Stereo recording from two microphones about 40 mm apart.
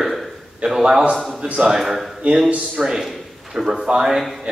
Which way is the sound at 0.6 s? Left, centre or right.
Right.